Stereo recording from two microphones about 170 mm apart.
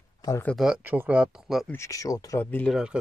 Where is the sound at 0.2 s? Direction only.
20° left (ahead or behind).